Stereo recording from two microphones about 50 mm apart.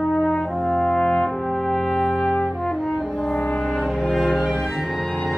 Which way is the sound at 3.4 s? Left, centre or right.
Left.